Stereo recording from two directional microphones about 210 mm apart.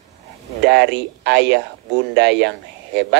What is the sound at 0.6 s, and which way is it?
Speech, 55° right (ahead or behind).